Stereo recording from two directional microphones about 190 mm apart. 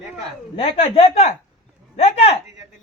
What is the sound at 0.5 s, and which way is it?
A woman's voice, 35° left (ahead or behind).